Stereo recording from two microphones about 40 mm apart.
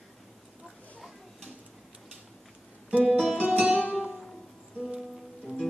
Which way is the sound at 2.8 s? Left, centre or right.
Right.